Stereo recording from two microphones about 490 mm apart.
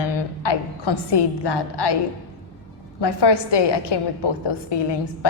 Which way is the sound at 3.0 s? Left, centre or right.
Left.